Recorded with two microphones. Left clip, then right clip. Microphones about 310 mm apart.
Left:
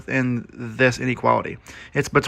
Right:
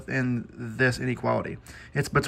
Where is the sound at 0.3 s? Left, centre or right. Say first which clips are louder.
Left 4 dB; centre.